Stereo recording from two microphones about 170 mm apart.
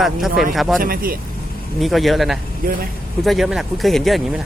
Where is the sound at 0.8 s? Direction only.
60° right (ahead or behind).